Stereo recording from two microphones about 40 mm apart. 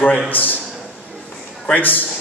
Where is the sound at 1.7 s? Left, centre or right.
Left.